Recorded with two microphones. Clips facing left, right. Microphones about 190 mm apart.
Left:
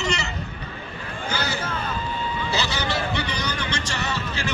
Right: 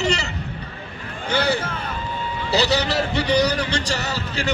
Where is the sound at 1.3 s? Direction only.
30° right (ahead or behind).